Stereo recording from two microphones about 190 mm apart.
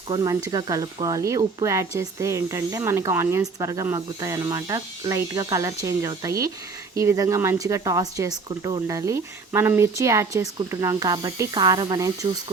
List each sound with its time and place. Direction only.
0.1 s speech: 20° right (ahead or behind)